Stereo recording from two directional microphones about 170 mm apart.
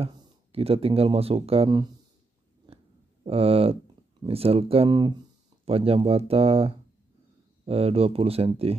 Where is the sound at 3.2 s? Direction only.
35° right (ahead or behind).